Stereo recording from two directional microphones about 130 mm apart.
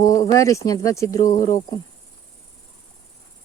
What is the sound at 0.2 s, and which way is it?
Speech, 25° left (ahead or behind).